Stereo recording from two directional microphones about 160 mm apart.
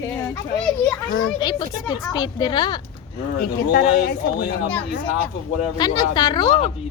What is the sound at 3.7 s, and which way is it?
Speech, 85° left.